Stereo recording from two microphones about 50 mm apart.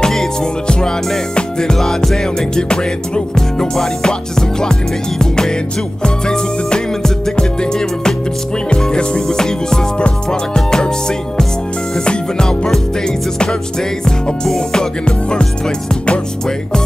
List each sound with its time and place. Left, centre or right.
0.0 s music: centre